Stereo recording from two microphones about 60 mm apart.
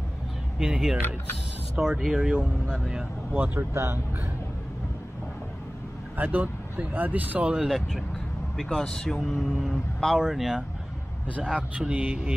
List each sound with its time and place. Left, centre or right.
0.6 s speech: centre
3.3 s speech: right
3.7 s speech: right
6.1 s speech: right
7.5 s speech: centre
8.8 s speech: centre
9.2 s speech: centre
11.7 s speech: right